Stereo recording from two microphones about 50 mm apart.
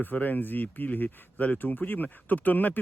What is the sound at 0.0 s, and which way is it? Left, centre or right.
Speech, left.